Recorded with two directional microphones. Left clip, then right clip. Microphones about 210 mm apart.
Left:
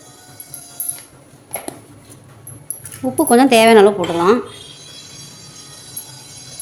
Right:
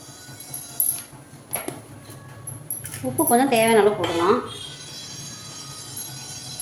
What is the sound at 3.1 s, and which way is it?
Speech, 55° left (ahead or behind).